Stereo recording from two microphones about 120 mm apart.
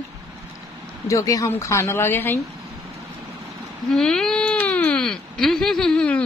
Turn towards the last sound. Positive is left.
turn(degrees=10)  # may be behind; listen again after turning